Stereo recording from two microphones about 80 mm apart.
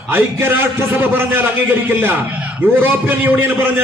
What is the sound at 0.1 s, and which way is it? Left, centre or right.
A man's voice, right.